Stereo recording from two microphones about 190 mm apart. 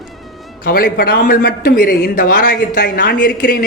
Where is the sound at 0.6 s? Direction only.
55° left (ahead or behind).